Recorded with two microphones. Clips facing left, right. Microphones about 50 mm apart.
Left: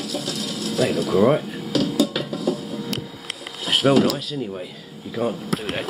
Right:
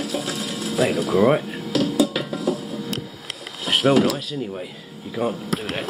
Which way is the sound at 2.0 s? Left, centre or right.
Centre.